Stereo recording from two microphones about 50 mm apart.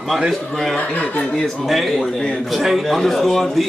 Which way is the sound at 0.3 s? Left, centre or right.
Centre.